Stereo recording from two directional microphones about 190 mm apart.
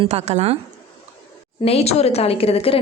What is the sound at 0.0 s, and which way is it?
Speech, 35° right (ahead or behind).